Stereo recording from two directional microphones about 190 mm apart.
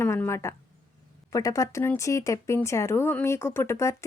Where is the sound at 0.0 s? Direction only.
10° left (ahead or behind).